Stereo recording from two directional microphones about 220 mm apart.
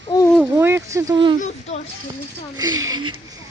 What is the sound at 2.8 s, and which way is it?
Speech, 70° right (ahead or behind).